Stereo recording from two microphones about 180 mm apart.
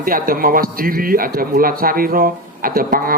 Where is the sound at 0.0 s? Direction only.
55° right (ahead or behind).